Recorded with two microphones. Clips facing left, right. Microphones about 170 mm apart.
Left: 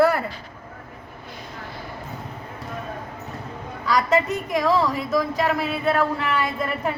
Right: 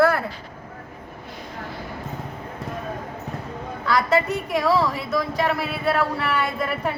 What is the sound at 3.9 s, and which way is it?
A woman's voice, 5° right (ahead or behind).